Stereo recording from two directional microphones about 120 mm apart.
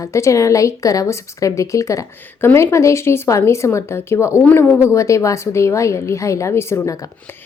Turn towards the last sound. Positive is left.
turn(degrees=25)  # may be behind; listen again after turning